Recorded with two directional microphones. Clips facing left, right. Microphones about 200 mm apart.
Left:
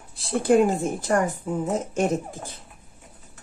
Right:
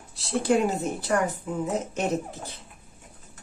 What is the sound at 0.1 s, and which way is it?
Speech, 55° left (ahead or behind).